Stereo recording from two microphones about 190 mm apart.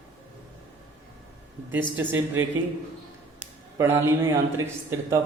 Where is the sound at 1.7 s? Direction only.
10° right (ahead or behind).